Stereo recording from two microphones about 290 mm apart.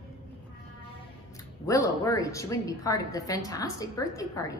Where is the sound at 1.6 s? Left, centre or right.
Centre.